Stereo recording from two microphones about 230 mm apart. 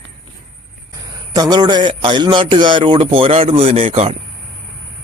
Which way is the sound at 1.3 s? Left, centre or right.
Centre.